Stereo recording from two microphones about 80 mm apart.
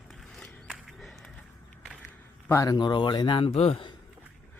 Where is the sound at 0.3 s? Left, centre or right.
Centre.